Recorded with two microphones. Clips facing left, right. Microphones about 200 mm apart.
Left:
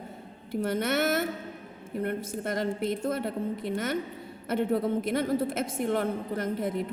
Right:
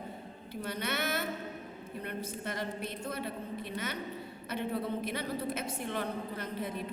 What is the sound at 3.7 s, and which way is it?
A woman's voice, 50° left (ahead or behind).